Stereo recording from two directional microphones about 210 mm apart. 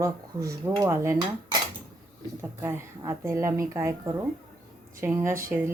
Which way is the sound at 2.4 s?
10° right (ahead or behind).